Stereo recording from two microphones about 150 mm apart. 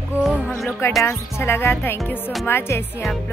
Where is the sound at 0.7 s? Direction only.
15° left (ahead or behind).